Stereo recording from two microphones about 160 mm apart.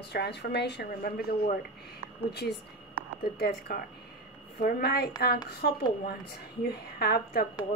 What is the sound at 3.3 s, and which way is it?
A woman's voice, 75° left (ahead or behind).